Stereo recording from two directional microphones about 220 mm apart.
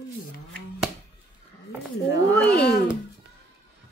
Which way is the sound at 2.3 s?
5° left (ahead or behind).